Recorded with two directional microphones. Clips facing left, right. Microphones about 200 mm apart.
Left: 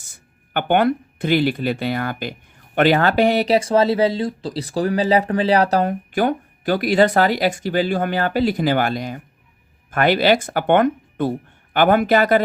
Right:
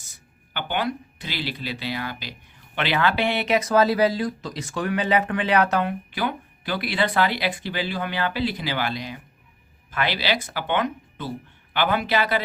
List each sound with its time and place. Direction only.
0.1 s speech: 55° left (ahead or behind)